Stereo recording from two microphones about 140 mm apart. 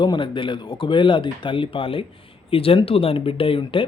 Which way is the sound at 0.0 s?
35° left (ahead or behind).